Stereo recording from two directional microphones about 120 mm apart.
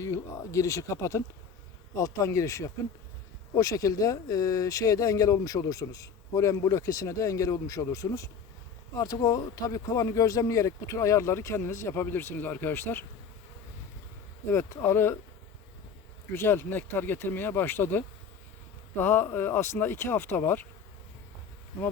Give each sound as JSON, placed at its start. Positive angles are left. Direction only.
{"t": 0.0, "sound": "speech", "side_deg": 25}
{"t": 14.5, "sound": "speech", "side_deg": 20}
{"t": 16.3, "sound": "speech", "side_deg": 20}